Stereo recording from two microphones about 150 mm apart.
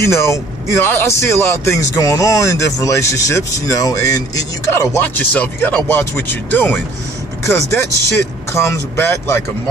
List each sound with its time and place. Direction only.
0.0 s speech: 20° left (ahead or behind)
4.9 s speech: 10° left (ahead or behind)